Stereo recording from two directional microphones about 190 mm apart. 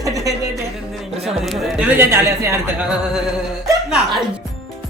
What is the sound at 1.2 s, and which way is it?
Speech, centre (ahead or behind).